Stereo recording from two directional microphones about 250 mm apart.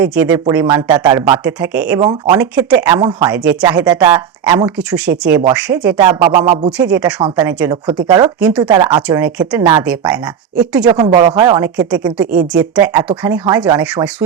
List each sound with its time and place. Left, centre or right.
0.0 s speech: centre
2.0 s speech: centre
2.4 s speech: centre
3.8 s speech: centre
4.6 s speech: centre
6.0 s a sound: centre
6.7 s speech: centre
8.4 s speech: centre
8.6 s speech: centre
9.0 s speech: centre
10.8 s speech: centre